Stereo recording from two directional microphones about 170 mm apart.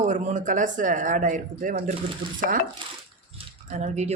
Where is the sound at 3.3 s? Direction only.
40° right (ahead or behind).